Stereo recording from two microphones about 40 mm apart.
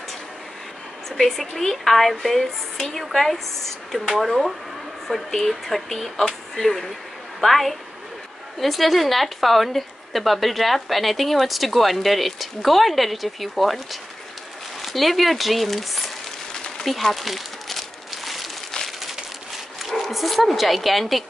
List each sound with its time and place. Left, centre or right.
1.0 s a woman's voice: centre
5.3 s a woman's voice: centre
14.8 s a woman's voice: centre
16.5 s a sound: left
16.8 s crumpling: centre
19.8 s speech: centre